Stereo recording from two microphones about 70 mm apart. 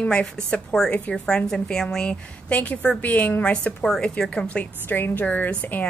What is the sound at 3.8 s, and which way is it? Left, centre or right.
A woman's voice, centre.